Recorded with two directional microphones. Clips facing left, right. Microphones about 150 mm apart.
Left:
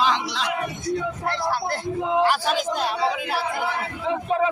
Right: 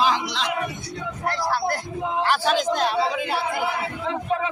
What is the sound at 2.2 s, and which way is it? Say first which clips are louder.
Speech: even; 10° left (ahead or behind).